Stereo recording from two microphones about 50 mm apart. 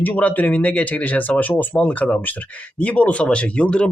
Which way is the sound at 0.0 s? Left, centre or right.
Left.